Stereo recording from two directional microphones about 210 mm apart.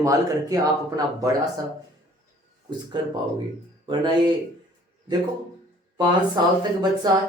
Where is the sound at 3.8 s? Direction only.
20° right (ahead or behind).